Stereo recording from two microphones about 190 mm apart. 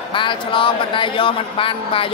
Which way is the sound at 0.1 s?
25° left (ahead or behind).